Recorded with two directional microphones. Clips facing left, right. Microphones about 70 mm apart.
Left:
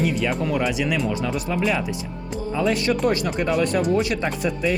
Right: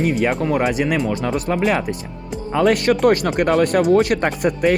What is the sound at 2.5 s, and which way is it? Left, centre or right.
Speech, right.